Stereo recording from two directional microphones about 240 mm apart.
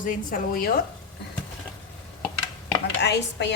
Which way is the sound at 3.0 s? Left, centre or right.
Left.